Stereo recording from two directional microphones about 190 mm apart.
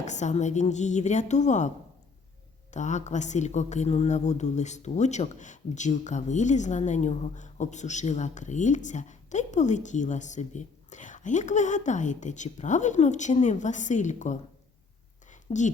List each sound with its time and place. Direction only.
0.0 s speech: 40° left (ahead or behind)
2.7 s speech: 40° left (ahead or behind)
15.3 s a sound: 40° left (ahead or behind)